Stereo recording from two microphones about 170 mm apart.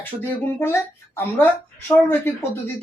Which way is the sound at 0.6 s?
15° left (ahead or behind).